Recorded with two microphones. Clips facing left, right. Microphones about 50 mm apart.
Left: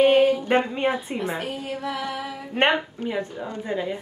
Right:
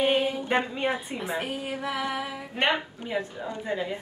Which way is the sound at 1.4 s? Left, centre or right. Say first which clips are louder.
Left 2 dB; centre.